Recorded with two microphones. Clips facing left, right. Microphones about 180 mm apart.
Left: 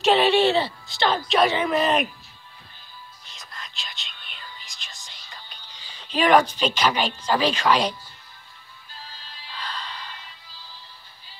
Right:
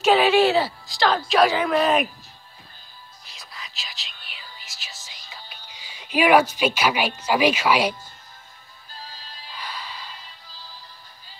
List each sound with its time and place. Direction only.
0.0 s a woman's voice: centre (ahead or behind)
3.3 s whispering: centre (ahead or behind)
9.5 s music: 10° right (ahead or behind)